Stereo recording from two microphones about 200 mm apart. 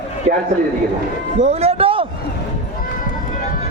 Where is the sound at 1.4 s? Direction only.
30° right (ahead or behind).